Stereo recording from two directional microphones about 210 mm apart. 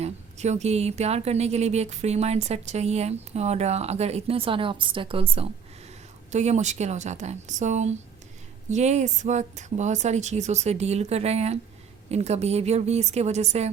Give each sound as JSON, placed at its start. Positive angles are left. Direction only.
{"t": 0.0, "sound": "a woman's voice", "side_deg": -35}